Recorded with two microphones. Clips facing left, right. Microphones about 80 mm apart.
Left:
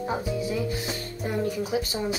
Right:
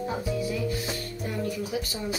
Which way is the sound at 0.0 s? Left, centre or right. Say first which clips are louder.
Left 1 dB; left.